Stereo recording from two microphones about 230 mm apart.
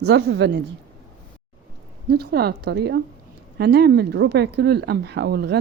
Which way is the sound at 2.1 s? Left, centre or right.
Right.